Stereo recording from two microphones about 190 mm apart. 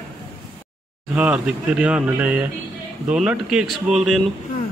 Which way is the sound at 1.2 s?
5° right (ahead or behind).